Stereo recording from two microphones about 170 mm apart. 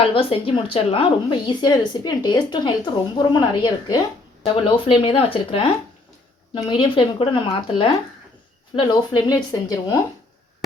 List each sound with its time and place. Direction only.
0.0 s a woman's voice: 35° left (ahead or behind)